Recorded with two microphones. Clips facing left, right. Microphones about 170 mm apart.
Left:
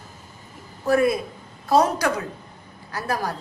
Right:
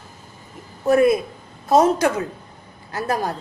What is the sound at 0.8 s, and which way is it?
Speech, 20° right (ahead or behind).